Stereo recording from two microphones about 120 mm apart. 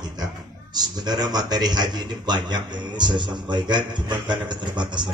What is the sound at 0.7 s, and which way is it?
A man's voice, 35° right (ahead or behind).